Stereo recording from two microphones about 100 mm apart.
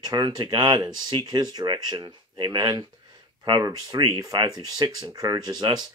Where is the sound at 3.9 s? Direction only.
50° right (ahead or behind).